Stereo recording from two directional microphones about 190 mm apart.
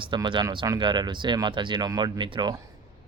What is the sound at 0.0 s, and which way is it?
Speech, 25° right (ahead or behind).